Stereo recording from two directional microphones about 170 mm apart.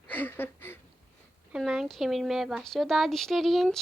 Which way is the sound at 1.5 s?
Centre (ahead or behind).